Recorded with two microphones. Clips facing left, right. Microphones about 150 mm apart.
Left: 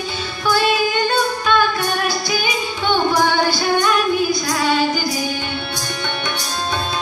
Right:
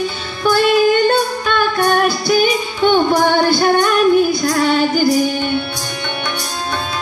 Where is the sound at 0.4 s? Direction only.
50° right (ahead or behind).